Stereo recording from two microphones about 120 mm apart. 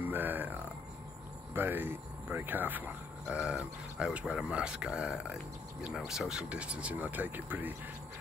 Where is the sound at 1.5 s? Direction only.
15° right (ahead or behind).